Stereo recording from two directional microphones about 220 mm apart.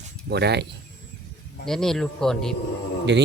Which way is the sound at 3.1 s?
50° right (ahead or behind).